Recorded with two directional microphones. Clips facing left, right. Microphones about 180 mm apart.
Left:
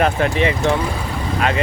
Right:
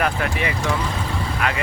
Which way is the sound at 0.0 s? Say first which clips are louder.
Left 6 dB; 25° left (ahead or behind).